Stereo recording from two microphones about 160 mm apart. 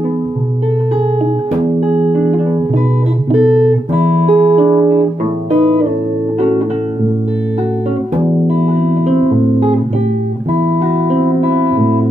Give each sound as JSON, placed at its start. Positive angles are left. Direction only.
{"t": 1.9, "sound": "music", "side_deg": -5}
{"t": 3.9, "sound": "music", "side_deg": -45}